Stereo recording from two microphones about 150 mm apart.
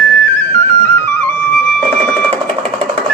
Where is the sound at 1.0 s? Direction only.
15° left (ahead or behind).